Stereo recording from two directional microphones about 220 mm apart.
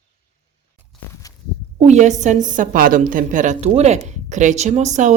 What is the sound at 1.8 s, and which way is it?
Speech, 30° right (ahead or behind).